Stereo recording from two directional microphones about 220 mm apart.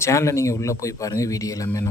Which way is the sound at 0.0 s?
15° left (ahead or behind).